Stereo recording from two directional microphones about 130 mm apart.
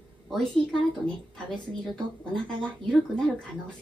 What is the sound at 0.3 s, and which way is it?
A woman's voice, 5° left (ahead or behind).